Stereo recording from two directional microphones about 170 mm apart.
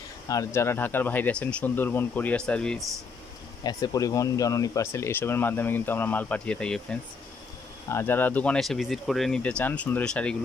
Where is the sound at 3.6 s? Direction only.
20° left (ahead or behind).